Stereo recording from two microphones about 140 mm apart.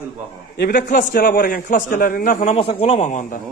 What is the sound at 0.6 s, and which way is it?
A man's voice, 70° left (ahead or behind).